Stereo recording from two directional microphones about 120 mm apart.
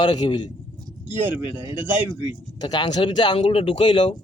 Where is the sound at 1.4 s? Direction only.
45° left (ahead or behind).